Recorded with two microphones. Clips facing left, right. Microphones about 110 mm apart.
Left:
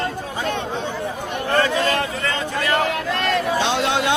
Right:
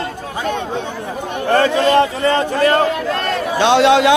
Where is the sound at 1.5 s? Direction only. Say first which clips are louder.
Right 7 dB; 30° right (ahead or behind).